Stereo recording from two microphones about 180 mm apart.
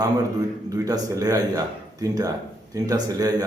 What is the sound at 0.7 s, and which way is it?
Speech, 20° right (ahead or behind).